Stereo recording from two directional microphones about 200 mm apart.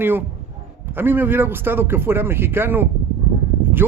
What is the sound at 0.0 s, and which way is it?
Speech, 10° right (ahead or behind).